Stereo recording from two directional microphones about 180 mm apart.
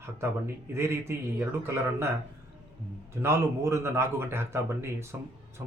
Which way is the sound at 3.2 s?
15° right (ahead or behind).